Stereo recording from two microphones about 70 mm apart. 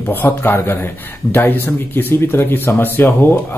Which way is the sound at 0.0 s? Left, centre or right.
Left.